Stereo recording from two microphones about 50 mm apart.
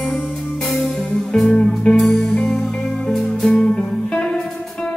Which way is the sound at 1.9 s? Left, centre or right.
Centre.